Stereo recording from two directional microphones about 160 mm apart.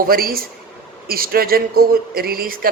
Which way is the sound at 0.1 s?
65° right (ahead or behind).